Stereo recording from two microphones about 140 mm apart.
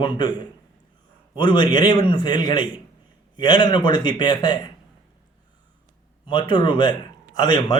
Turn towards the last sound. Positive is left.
turn(degrees=30)  # may be behind; listen again after turning